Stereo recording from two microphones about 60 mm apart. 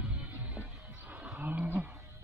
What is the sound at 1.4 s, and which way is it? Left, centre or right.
Roaring cats, right.